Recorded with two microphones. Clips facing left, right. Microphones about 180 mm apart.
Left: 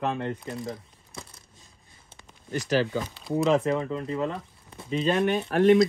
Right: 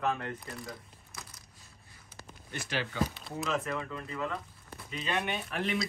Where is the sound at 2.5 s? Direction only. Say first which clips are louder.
Left 11 dB; 40° left (ahead or behind).